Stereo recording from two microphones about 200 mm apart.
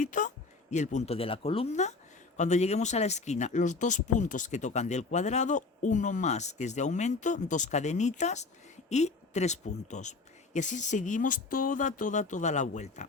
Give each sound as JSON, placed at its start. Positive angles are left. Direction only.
{"t": 0.0, "sound": "speech", "side_deg": 40}